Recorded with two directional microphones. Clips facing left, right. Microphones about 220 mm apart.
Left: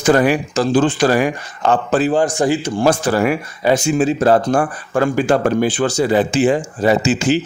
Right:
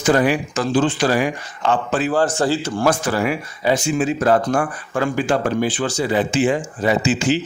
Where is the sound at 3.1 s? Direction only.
50° left (ahead or behind).